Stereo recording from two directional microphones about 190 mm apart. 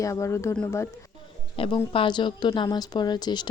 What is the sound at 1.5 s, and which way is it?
A woman's voice, 30° left (ahead or behind).